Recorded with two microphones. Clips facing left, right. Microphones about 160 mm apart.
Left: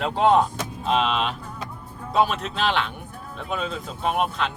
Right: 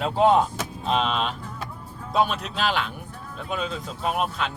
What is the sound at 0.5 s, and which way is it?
Speech, centre (ahead or behind).